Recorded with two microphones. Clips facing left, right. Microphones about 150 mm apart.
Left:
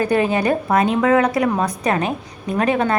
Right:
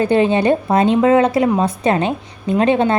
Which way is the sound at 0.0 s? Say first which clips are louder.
Right 4 dB; 25° right (ahead or behind).